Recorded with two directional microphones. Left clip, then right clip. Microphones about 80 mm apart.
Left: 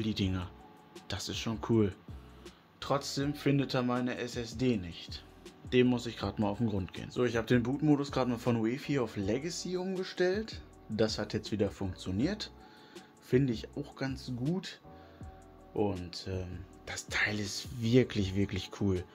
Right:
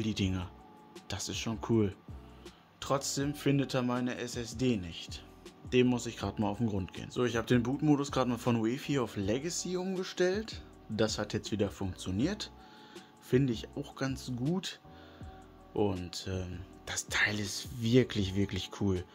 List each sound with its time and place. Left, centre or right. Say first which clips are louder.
0.0 s speech: even; right
2.8 s speech: even; right
5.7 s speech: even; right
13.8 s speech: right 4 dB; right
14.5 s speech: right 2 dB; right
16.1 s speech: right 1 dB; right
16.8 s speech: right 2 dB; right